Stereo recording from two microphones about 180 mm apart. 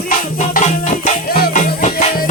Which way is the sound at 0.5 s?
45° left (ahead or behind).